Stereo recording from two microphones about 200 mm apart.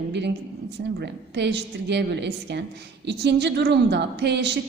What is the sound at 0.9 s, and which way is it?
A woman's voice, 60° right (ahead or behind).